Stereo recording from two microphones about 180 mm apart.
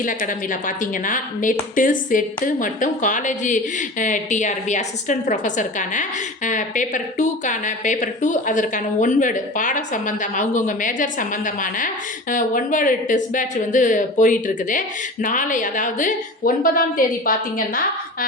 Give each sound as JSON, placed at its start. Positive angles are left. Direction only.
{"t": 0.0, "sound": "a woman's voice", "side_deg": 50}